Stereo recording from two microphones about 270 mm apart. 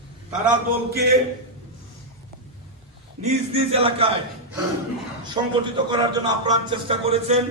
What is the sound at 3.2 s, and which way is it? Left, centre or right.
Speech, right.